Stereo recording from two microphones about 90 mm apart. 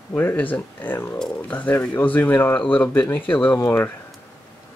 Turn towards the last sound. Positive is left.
turn(degrees=20)  # may be behind; listen again after turning